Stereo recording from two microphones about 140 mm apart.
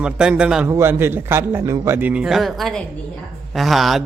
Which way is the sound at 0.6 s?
20° right (ahead or behind).